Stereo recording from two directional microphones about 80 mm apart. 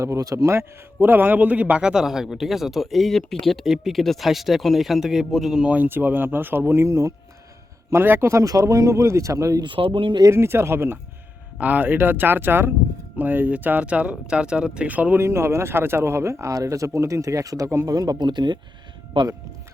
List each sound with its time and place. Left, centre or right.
0.0 s speech: right
1.0 s a man's voice: right; by 5.6 s centre
5.6 s speech: right
7.9 s speech: right
9.6 s speech: right
10.2 s speech: right
15.2 s speech: right
17.9 s speech: right
19.1 s speech: right